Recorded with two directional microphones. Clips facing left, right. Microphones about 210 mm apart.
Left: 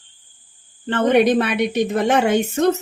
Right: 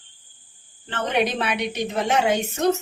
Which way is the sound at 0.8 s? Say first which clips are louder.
Left 9 dB; 55° left (ahead or behind).